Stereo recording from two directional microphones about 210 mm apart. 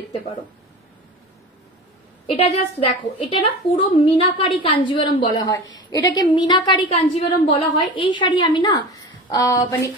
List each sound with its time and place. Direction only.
2.2 s a woman's voice: 30° left (ahead or behind); by 9.8 s 15° left (ahead or behind)